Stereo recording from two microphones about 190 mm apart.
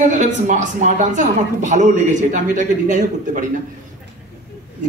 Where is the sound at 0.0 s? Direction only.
40° right (ahead or behind).